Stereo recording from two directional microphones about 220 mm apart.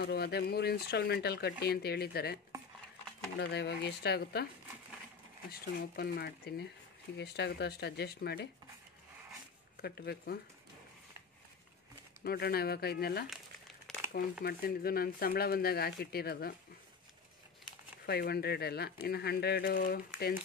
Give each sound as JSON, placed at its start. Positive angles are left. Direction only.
{"t": 0.0, "sound": "speech", "side_deg": 45}
{"t": 5.5, "sound": "speech", "side_deg": 45}
{"t": 9.8, "sound": "speech", "side_deg": 45}
{"t": 12.2, "sound": "speech", "side_deg": 45}
{"t": 13.9, "sound": "crumpling", "side_deg": 0}
{"t": 14.4, "sound": "speech", "side_deg": 45}
{"t": 18.0, "sound": "speech", "side_deg": 45}